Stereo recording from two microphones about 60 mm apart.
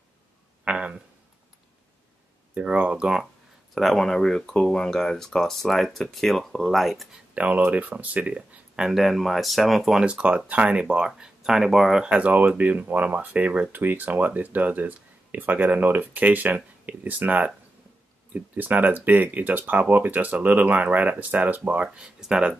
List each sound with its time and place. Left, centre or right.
0.7 s a sound: centre
2.5 s speech: right
3.7 s speech: centre
7.3 s speech: right
8.8 s speech: centre
10.0 s speech: centre
12.0 s speech: centre
21.8 s speech: centre